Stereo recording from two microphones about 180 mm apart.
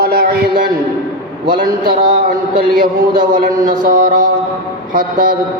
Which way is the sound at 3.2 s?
50° right (ahead or behind).